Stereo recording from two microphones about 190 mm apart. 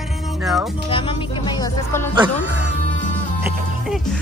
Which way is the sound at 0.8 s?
30° left (ahead or behind).